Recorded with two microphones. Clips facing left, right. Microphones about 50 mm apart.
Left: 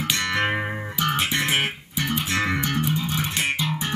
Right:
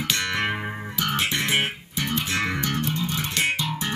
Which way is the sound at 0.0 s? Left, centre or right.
Centre.